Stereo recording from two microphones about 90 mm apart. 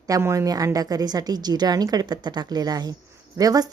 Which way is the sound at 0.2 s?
35° right (ahead or behind).